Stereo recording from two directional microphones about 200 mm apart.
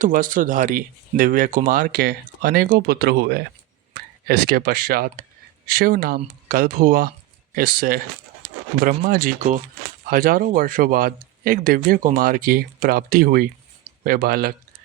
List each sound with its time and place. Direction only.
0.0 s speech: 45° right (ahead or behind)